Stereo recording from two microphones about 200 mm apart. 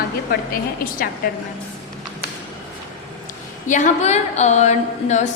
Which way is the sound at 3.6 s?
40° left (ahead or behind).